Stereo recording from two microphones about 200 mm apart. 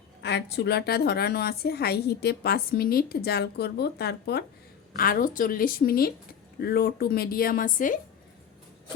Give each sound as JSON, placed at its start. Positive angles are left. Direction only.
{"t": 0.2, "sound": "a woman's voice", "side_deg": 60}